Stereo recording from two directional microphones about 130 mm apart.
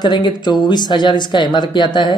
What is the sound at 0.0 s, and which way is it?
Speech, 35° left (ahead or behind).